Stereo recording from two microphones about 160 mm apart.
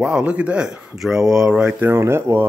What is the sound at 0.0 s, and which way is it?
Speech, 5° right (ahead or behind).